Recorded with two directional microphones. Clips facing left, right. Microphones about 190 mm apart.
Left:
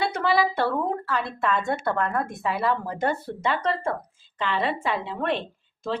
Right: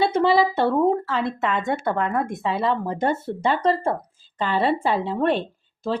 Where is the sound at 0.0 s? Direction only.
25° right (ahead or behind).